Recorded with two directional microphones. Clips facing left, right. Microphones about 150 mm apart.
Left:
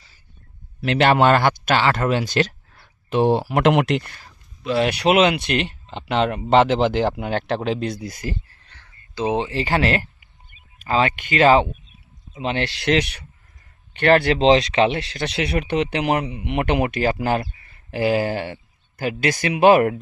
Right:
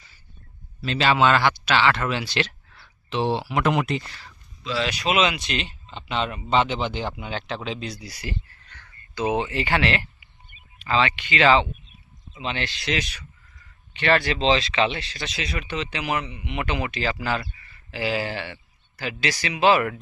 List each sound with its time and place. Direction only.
0.8 s speech: 65° left (ahead or behind); by 3.6 s 50° left (ahead or behind)
3.6 s speech: 75° left (ahead or behind); by 19.9 s 55° left (ahead or behind)